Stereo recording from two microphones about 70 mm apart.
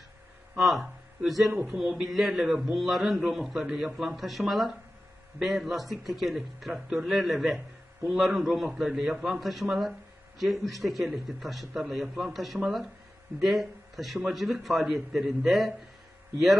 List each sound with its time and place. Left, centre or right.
0.6 s speech: centre
1.5 s a man's voice: right
2.0 s a man's voice: centre